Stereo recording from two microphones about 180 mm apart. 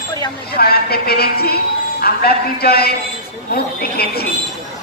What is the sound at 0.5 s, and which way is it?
A woman's voice, 60° left (ahead or behind).